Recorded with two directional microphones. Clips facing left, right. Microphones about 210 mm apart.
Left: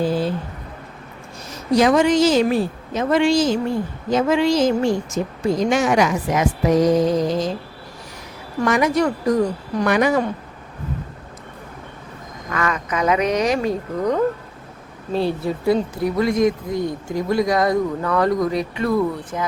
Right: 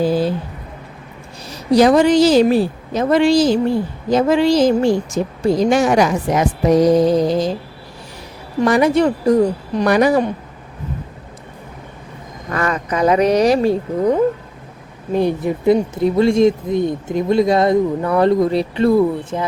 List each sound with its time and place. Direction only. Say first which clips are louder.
1.5 s a woman's voice: right 4 dB; 35° right (ahead or behind)
8.6 s a woman's voice: right 4 dB; 30° right (ahead or behind)
12.5 s speech: right 3 dB; 35° right (ahead or behind)
15.1 s speech: right 4 dB; 15° right (ahead or behind)